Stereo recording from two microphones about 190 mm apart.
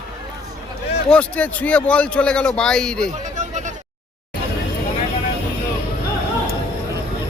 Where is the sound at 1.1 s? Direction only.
5° left (ahead or behind).